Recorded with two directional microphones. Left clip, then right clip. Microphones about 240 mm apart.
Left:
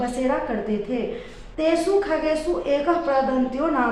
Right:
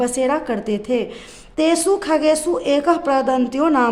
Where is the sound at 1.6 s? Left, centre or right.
Right.